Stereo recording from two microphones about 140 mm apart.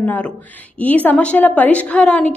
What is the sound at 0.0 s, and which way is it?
A woman's voice, 10° left (ahead or behind).